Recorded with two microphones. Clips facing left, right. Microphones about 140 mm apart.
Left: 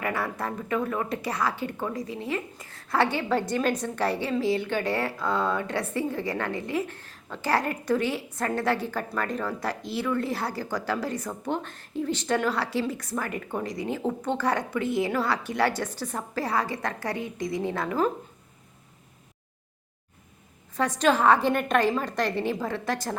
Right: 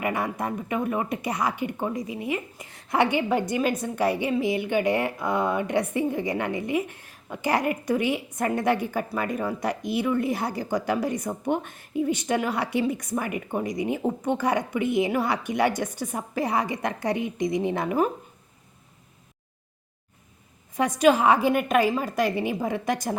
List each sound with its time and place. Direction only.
0.0 s speech: 15° right (ahead or behind)
20.7 s speech: 15° right (ahead or behind)